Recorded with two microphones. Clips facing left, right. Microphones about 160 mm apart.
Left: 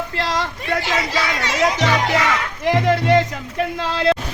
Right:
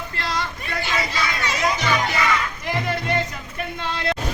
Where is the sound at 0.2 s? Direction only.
90° left.